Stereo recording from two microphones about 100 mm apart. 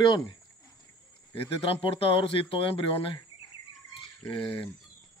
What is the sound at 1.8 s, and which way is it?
Speech, 65° left (ahead or behind).